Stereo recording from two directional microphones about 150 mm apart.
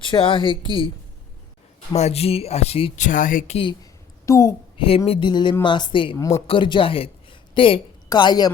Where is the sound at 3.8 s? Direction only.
20° left (ahead or behind).